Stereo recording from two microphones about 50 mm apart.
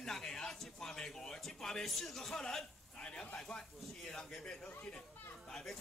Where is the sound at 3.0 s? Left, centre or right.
Centre.